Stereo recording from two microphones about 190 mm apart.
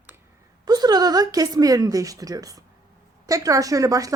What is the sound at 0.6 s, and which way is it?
A woman's voice, 20° right (ahead or behind).